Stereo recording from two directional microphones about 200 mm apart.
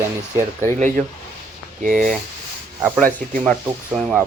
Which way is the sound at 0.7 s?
40° right (ahead or behind).